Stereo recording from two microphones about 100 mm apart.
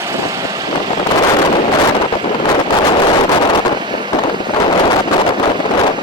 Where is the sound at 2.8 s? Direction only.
55° left (ahead or behind).